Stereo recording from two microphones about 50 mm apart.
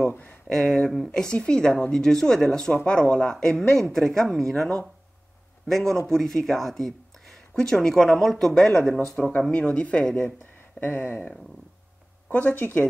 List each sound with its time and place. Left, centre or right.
0.1 s a sound: left
0.5 s speech: centre
1.2 s speech: centre
5.7 s speech: centre
9.1 s speech: left
10.8 s speech: left
12.3 s speech: left